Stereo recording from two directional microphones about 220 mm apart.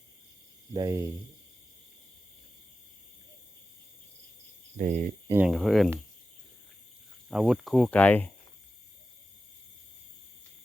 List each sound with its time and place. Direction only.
0.7 s speech: 15° right (ahead or behind)
4.8 s speech: 35° right (ahead or behind)
5.3 s speech: 5° right (ahead or behind)
7.3 s speech: centre (ahead or behind)